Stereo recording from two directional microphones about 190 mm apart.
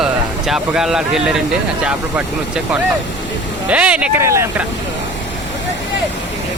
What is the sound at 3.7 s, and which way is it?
Speech, 5° right (ahead or behind).